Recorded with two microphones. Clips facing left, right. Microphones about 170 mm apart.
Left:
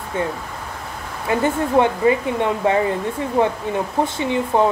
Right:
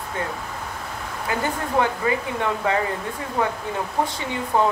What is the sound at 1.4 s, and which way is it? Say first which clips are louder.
Speech: left 6 dB; 25° left (ahead or behind).